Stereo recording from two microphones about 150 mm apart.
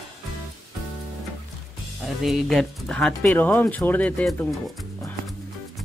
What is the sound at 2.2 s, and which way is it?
Speech, centre (ahead or behind).